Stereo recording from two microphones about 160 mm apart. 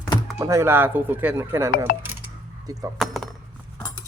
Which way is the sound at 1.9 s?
65° left (ahead or behind).